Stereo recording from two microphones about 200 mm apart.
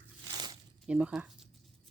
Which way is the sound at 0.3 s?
20° right (ahead or behind).